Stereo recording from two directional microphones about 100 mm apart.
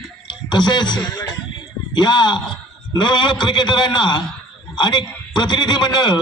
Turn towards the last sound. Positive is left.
turn(degrees=45)  # may be behind; listen again after turning